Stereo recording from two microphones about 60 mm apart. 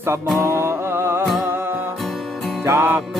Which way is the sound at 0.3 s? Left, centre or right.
Right.